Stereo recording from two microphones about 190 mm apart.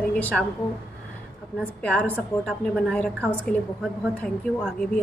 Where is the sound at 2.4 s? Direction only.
5° left (ahead or behind).